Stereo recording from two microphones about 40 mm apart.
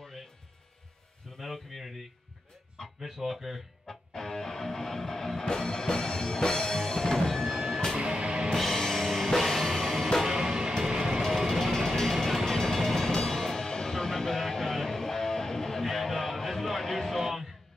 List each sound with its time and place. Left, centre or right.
1.4 s speech: centre
3.0 s speech: centre
3.8 s music: centre
8.0 s music: right
8.5 s music: centre
10.2 s music: centre